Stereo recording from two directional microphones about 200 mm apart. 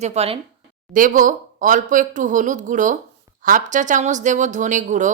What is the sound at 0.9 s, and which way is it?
Speech, 40° right (ahead or behind).